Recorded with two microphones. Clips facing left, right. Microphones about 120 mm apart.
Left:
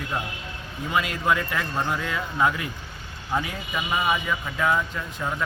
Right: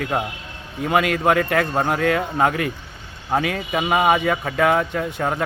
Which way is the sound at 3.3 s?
70° right (ahead or behind).